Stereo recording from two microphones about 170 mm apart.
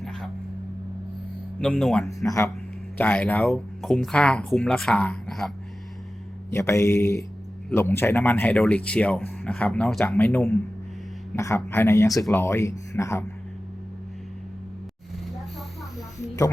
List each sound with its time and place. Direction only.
1.6 s speech: 5° left (ahead or behind)
2.0 s speech: 20° left (ahead or behind); by 5.5 s 5° left (ahead or behind)
6.5 s speech: 15° left (ahead or behind)